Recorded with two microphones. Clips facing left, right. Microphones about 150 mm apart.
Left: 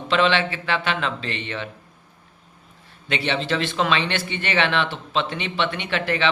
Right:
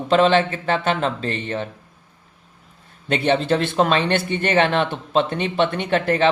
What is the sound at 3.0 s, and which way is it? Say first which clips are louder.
Speech: right 6 dB; 45° right (ahead or behind).